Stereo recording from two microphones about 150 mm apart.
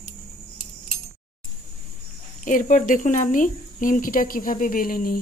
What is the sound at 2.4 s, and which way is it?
Speech, 60° left (ahead or behind).